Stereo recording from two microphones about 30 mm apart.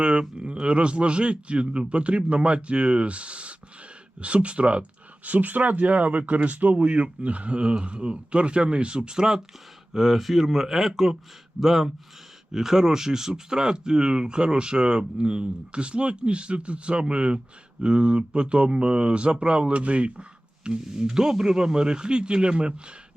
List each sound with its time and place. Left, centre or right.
0.0 s a sound: right
0.6 s speech: right
5.2 s speech: right
9.9 s speech: centre; by 20.2 s right
20.7 s speech: right